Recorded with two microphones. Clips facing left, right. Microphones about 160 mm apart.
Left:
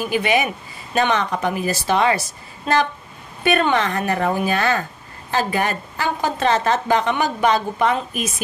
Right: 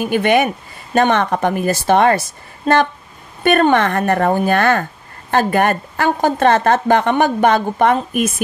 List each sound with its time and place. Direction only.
0.0 s a woman's voice: 55° right (ahead or behind)